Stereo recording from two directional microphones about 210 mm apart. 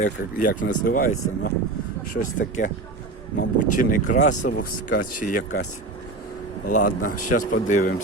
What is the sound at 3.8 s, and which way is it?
Speech, 35° left (ahead or behind).